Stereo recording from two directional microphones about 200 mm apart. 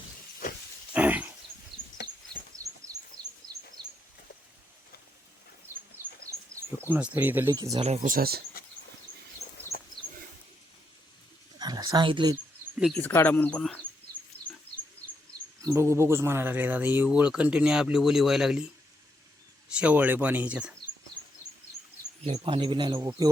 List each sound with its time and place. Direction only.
0.9 s a sound: 10° right (ahead or behind)
1.7 s a sound: 25° right (ahead or behind)
2.6 s bird: 15° right (ahead or behind)
3.2 s bird: 5° left (ahead or behind)
3.8 s bird: 20° right (ahead or behind)
5.7 s bird: 10° right (ahead or behind)
6.5 s speech: 10° right (ahead or behind)
7.8 s speech: 30° right (ahead or behind)
8.6 s a sound: 50° left (ahead or behind)
11.6 s a sound: 20° right (ahead or behind)
13.0 s speech: 10° left (ahead or behind)
15.6 s speech: 15° right (ahead or behind)
19.7 s speech: 5° right (ahead or behind)
22.3 s speech: 25° right (ahead or behind)